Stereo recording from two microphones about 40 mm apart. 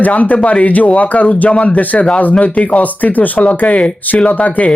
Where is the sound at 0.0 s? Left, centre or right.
Left.